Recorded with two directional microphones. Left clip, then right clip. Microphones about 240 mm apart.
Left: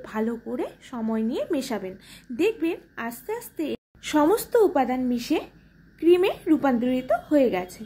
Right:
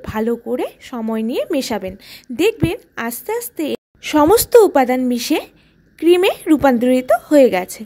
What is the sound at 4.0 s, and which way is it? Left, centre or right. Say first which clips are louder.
Speech: right 9 dB; right.